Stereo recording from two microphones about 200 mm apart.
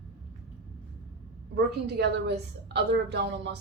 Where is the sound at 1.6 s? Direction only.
55° right (ahead or behind).